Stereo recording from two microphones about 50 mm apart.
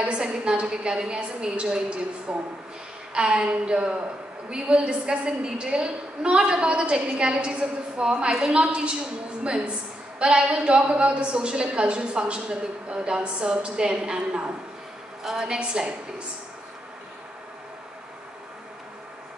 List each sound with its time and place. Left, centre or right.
0.0 s a woman's voice: centre
10.1 s a woman's voice: centre